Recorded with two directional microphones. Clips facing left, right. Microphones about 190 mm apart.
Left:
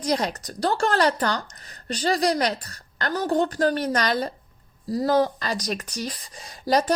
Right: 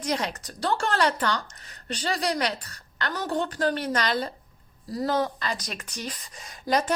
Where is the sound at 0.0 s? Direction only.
40° left (ahead or behind).